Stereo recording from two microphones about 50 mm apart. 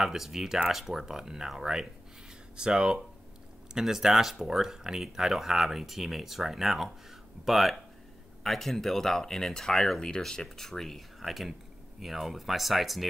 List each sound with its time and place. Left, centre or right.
0.0 s speech: centre